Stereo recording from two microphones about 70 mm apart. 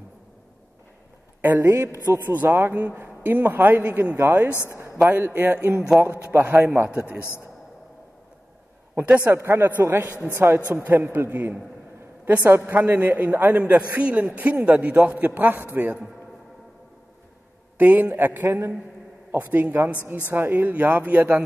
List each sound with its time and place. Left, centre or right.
1.6 s a woman's voice: right
2.3 s a woman's voice: right
4.6 s a sound: right
5.2 s a woman's voice: right
8.9 s a woman's voice: right
9.3 s a woman's voice: right
17.7 s a woman's voice: right